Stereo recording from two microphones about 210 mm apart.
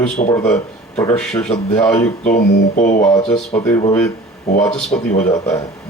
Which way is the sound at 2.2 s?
35° left (ahead or behind).